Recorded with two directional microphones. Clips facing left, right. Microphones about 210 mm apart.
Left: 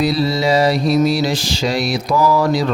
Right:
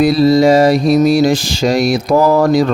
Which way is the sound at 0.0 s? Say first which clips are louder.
Right 8 dB; 45° right (ahead or behind).